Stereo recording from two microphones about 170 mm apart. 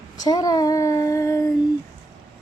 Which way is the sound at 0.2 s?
25° left (ahead or behind).